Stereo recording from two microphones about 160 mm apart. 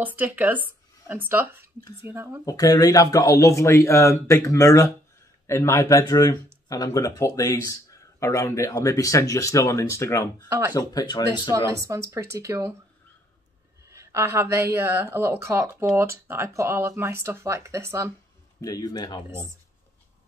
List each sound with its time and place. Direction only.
0.0 s speech: 10° right (ahead or behind)
2.4 s speech: 25° left (ahead or behind)
11.7 s speech: 20° right (ahead or behind)
13.8 s speech: 20° right (ahead or behind)
18.6 s speech: 25° left (ahead or behind)